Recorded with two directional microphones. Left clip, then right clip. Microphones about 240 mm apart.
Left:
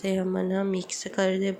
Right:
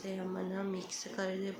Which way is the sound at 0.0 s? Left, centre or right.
Left.